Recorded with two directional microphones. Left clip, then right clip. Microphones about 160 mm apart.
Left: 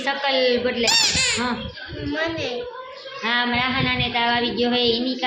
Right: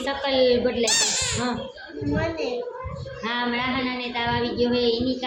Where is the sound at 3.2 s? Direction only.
30° left (ahead or behind).